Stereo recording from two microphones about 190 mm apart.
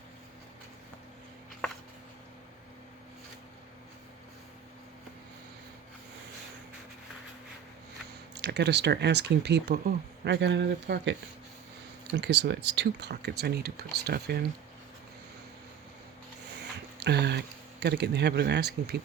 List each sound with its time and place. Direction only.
8.4 s speech: 65° right (ahead or behind)
17.0 s speech: 60° right (ahead or behind)